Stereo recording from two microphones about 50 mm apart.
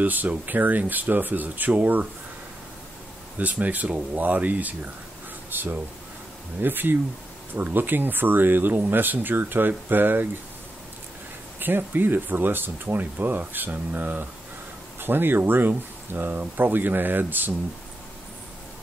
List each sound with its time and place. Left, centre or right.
0.0 s speech: right
3.3 s speech: right
11.6 s speech: right